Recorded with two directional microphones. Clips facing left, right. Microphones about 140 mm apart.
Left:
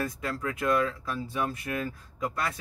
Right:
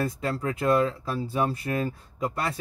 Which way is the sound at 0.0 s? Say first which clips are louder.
Right 4 dB; 30° right (ahead or behind).